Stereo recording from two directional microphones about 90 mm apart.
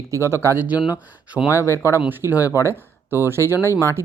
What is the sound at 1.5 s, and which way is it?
Speech, 30° left (ahead or behind).